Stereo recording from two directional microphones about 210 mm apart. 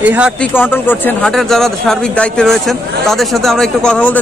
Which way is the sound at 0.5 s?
10° left (ahead or behind).